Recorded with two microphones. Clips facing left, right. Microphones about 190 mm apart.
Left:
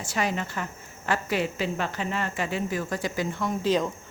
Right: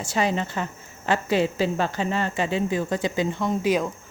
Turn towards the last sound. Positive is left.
turn(degrees=-10)  # may be behind; listen again after turning